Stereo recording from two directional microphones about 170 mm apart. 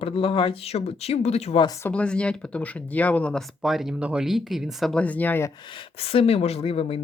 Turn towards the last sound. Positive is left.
turn(degrees=35)  # may be behind; listen again after turning